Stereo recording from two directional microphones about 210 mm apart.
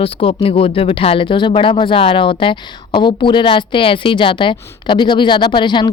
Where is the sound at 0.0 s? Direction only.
25° left (ahead or behind).